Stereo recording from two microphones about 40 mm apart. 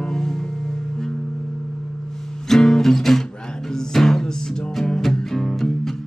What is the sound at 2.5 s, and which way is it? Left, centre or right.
Music, centre.